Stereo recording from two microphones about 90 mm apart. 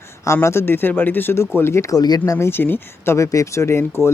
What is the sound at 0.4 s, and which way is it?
Speech, 25° left (ahead or behind).